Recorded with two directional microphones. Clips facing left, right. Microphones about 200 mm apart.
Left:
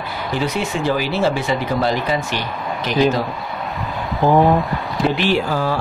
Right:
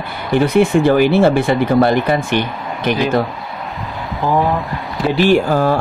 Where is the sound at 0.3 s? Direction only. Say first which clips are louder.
Right 10 dB; 55° right (ahead or behind).